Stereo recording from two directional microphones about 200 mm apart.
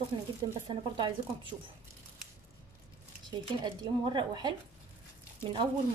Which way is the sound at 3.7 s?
25° right (ahead or behind).